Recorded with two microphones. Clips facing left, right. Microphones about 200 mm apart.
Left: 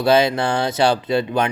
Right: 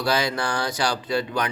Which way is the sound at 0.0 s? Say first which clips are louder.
Left 8 dB; 25° left (ahead or behind).